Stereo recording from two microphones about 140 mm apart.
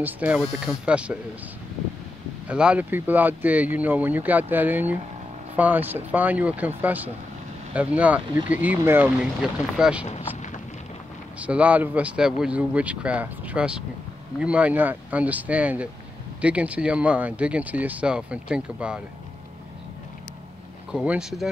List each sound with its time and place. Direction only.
0.0 s speech: 10° right (ahead or behind)
2.4 s speech: 5° right (ahead or behind)
10.0 s speech: 50° left (ahead or behind)
11.3 s speech: 10° right (ahead or behind)
20.9 s speech: 5° right (ahead or behind)